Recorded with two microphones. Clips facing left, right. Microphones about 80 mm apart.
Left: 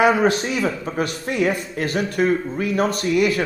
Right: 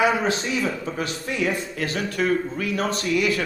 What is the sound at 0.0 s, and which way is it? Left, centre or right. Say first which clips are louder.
Speech: left 5 dB; left.